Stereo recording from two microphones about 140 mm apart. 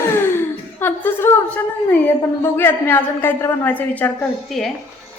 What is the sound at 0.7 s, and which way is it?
A woman's voice, 15° left (ahead or behind).